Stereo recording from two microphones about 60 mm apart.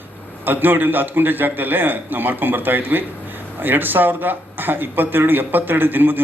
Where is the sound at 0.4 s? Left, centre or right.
Right.